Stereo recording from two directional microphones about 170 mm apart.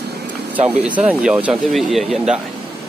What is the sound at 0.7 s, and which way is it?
Speech, 10° right (ahead or behind).